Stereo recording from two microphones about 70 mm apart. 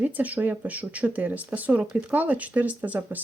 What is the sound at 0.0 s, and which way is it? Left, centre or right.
Speech, right.